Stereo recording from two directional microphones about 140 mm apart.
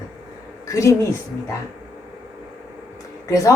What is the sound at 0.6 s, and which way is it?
Speech, 25° left (ahead or behind).